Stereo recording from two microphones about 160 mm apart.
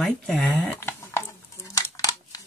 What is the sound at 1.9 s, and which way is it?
Crumpling, 20° left (ahead or behind).